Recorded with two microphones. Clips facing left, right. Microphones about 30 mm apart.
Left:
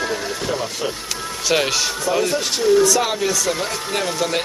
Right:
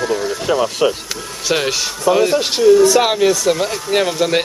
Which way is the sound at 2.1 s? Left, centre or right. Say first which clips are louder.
Right 5 dB; centre.